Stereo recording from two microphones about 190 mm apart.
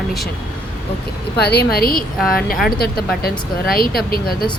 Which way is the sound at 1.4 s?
55° left (ahead or behind).